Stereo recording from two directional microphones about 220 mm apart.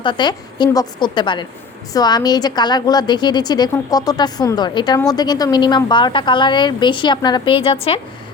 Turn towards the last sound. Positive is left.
turn(degrees=25)  # may be behind; listen again after turning